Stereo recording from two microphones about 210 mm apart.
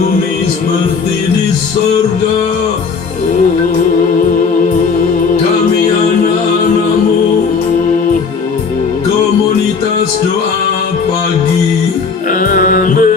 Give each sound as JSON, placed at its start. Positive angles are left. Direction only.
{"t": 12.3, "sound": "music", "side_deg": 40}